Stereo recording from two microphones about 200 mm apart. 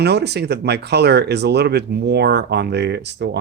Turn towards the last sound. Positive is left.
turn(degrees=-60)  # may be behind; listen again after turning